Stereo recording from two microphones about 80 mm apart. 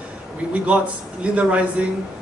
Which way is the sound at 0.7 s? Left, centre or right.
Centre.